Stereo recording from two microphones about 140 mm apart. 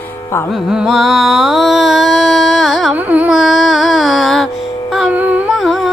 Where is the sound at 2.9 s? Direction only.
10° right (ahead or behind).